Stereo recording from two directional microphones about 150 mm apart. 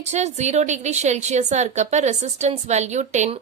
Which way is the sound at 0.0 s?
50° right (ahead or behind).